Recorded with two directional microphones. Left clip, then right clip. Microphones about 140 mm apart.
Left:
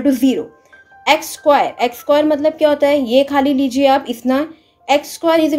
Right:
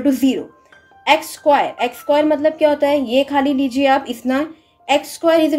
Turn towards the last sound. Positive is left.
turn(degrees=25)  # may be behind; listen again after turning